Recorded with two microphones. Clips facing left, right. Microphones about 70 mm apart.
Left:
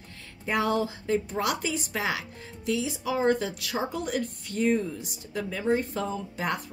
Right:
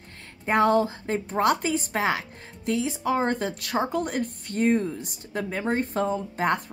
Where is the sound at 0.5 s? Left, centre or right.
Right.